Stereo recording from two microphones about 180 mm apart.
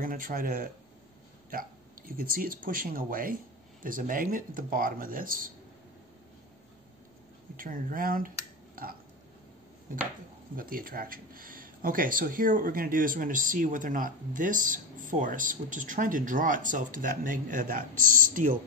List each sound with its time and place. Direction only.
0.0 s speech: 50° right (ahead or behind)
7.5 s speech: 50° right (ahead or behind)
8.8 s burping: 55° right (ahead or behind)
9.9 s speech: 50° right (ahead or behind)